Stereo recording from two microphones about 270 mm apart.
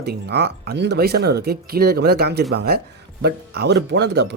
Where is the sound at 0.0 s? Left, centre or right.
Right.